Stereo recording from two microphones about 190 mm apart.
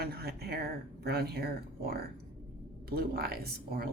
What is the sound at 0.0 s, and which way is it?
Speech, 55° right (ahead or behind).